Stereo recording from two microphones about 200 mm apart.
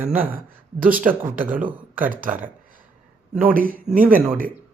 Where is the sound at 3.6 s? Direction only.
45° right (ahead or behind).